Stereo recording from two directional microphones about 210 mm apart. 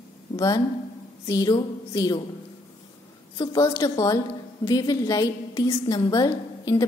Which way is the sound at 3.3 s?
15° left (ahead or behind).